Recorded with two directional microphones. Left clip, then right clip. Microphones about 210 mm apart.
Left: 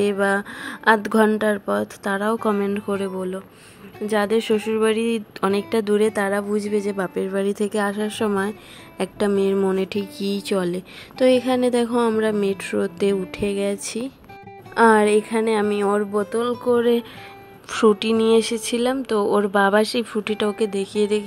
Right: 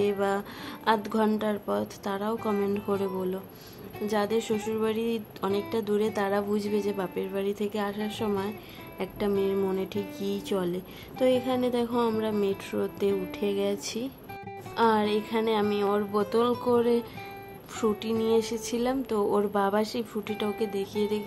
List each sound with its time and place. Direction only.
0.0 s a woman's voice: 20° left (ahead or behind)
14.8 s a woman's voice: 30° left (ahead or behind)
16.1 s speech: 10° left (ahead or behind)
17.6 s a woman's voice: 25° left (ahead or behind)